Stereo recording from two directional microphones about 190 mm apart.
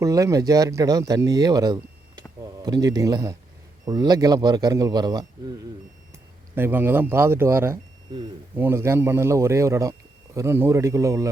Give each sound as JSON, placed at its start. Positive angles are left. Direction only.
{"t": 0.0, "sound": "speech", "side_deg": -15}
{"t": 6.6, "sound": "a man's voice", "side_deg": -10}